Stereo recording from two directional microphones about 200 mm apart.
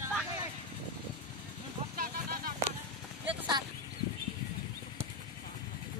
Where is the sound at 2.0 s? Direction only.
45° right (ahead or behind).